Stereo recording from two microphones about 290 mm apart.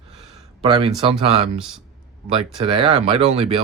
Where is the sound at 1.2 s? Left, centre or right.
Right.